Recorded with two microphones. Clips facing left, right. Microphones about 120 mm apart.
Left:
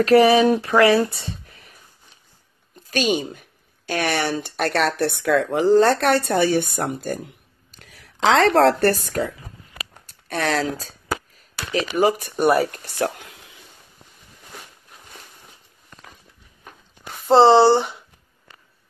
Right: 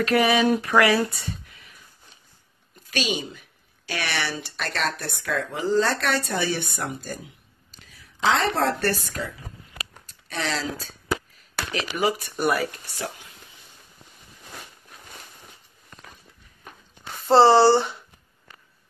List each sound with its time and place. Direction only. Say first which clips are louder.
0.0 s speech: left 6 dB; 35° left (ahead or behind)
2.9 s speech: left 6 dB; 50° left (ahead or behind)
7.8 s speech: left 4 dB; 70° left (ahead or behind); by 9.3 s 45° left (ahead or behind)
10.0 s a sound: left 6 dB; 50° left (ahead or behind)
10.8 s a sound: even; 40° left (ahead or behind)
11.7 s speech: left 6 dB; 45° left (ahead or behind)
12.4 s speech: left 7 dB; 35° left (ahead or behind)
12.7 s speech: left 9 dB; 60° left (ahead or behind)
17.3 s speech: left 2 dB; 15° left (ahead or behind)